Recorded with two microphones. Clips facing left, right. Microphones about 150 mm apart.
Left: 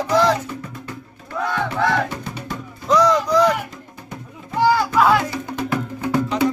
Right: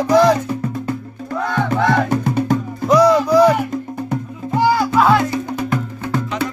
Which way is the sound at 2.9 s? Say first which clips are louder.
Right 4 dB; 10° right (ahead or behind).